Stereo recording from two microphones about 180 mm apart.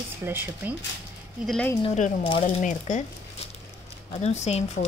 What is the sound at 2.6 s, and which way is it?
Speech, 40° left (ahead or behind).